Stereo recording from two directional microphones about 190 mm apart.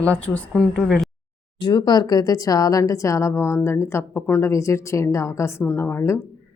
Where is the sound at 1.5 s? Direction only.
25° left (ahead or behind).